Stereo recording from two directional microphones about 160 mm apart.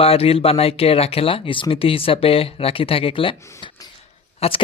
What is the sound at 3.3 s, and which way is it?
Speech, 20° left (ahead or behind).